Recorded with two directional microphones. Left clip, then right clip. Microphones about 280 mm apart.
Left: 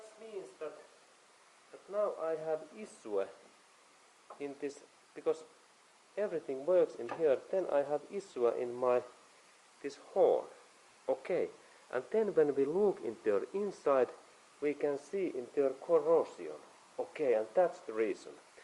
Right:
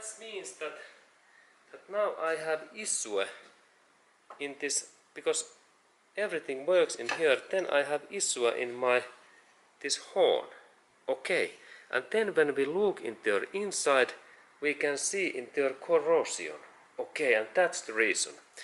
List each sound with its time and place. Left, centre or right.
0.3 s a sound: centre
1.9 s speech: centre
4.4 s speech: centre
12.7 s speech: left
13.0 s speech: centre